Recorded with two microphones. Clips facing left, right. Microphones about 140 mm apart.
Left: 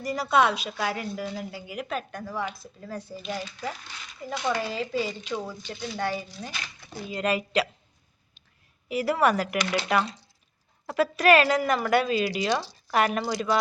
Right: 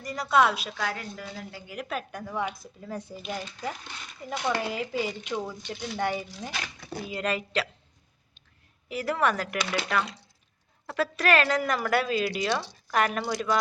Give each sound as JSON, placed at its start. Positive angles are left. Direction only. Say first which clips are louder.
{"t": 0.0, "sound": "speech", "louder": "left 1 dB", "side_deg": 5}
{"t": 0.7, "sound": "speech", "louder": "left 3 dB", "side_deg": 15}
{"t": 1.8, "sound": "speech", "louder": "left 1 dB", "side_deg": -5}
{"t": 2.3, "sound": "speech", "louder": "right 2 dB", "side_deg": -20}
{"t": 4.3, "sound": "speech", "louder": "left 1 dB", "side_deg": -10}
{"t": 5.3, "sound": "speech", "louder": "even", "side_deg": 0}
{"t": 6.0, "sound": "speech", "louder": "right 1 dB", "side_deg": -15}
{"t": 7.1, "sound": "speech", "louder": "left 3 dB", "side_deg": 0}
{"t": 7.3, "sound": "speech", "louder": "left 4 dB", "side_deg": 15}
{"t": 8.9, "sound": "speech", "louder": "left 3 dB", "side_deg": 10}